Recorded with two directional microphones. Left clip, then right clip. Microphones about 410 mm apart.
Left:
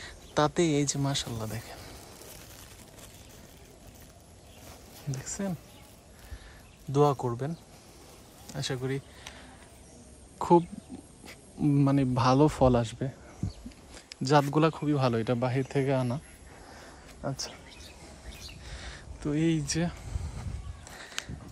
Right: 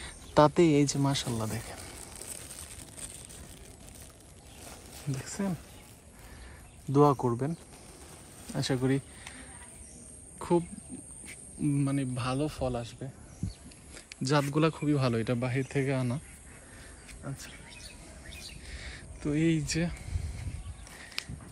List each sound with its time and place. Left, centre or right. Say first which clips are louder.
0.0 s speech: right 4 dB; centre
5.1 s speech: even; centre
6.9 s speech: right 1 dB; centre
8.5 s a sound: right 3 dB; centre
11.6 s speech: left 5 dB; centre
13.9 s speech: left 5 dB; centre
17.2 s a sound: left 9 dB; centre
21.2 s biting: even; centre